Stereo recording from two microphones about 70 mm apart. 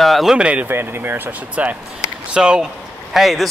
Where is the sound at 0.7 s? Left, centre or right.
Right.